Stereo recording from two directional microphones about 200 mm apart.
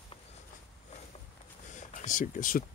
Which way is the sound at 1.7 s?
40° left (ahead or behind).